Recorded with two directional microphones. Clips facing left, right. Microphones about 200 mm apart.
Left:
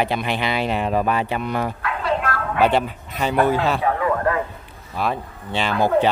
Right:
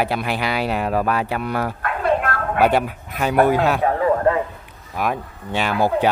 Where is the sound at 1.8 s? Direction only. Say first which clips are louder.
Right 3 dB; 50° right (ahead or behind).